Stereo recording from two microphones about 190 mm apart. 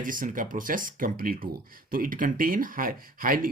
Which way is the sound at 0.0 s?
45° right (ahead or behind).